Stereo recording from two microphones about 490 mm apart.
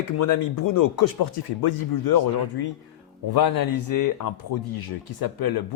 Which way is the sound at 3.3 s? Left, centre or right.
Left.